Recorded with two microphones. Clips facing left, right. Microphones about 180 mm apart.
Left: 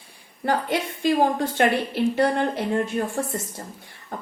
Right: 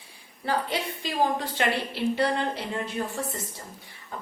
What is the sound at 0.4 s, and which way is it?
A woman's voice, 50° left (ahead or behind).